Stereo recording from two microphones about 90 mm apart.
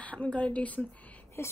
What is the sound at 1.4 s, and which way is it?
Speech, 30° left (ahead or behind).